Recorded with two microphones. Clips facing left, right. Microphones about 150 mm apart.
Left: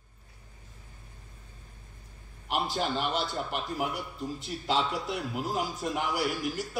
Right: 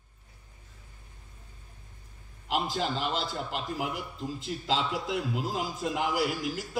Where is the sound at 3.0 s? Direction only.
90° right.